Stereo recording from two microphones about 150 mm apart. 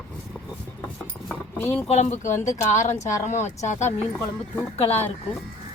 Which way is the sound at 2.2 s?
55° left (ahead or behind).